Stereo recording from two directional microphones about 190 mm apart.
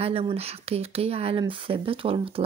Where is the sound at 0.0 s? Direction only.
30° right (ahead or behind).